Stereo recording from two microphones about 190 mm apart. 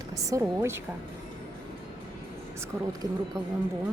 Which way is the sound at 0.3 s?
15° right (ahead or behind).